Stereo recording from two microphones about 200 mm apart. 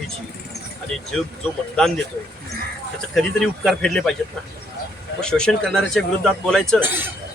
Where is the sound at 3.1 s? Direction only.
5° left (ahead or behind).